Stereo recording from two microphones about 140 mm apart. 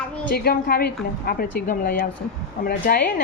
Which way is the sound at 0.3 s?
90° left.